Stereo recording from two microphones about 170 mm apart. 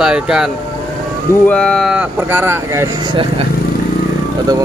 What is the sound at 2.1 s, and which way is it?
Speech, 10° right (ahead or behind).